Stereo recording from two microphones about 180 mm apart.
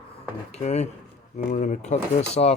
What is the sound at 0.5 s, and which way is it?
Speech, 40° left (ahead or behind).